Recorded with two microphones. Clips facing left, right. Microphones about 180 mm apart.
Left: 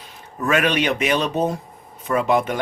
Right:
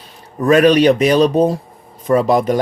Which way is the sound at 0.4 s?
35° right (ahead or behind).